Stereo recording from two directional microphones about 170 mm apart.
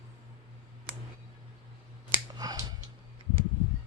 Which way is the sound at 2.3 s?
20° right (ahead or behind).